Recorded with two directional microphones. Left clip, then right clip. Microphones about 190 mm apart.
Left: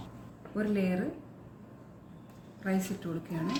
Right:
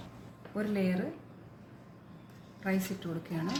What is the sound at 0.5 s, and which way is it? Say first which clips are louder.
Speech: left 1 dB; 35° right (ahead or behind).